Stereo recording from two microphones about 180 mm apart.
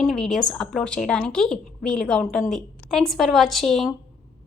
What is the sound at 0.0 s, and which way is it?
A woman's voice, centre (ahead or behind).